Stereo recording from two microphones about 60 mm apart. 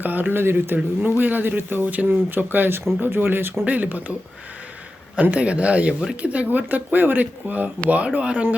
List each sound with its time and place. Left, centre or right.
0.0 s speech: right
5.1 s speech: right